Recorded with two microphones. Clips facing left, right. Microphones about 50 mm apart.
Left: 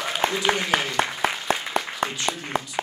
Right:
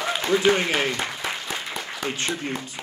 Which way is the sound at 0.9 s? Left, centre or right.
Left.